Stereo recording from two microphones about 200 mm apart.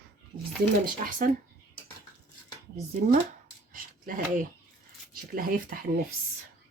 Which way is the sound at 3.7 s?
45° right (ahead or behind).